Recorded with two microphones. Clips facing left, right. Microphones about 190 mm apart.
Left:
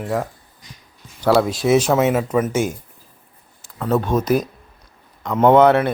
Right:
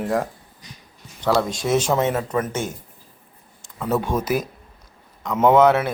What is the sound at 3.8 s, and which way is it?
Speech, 10° right (ahead or behind).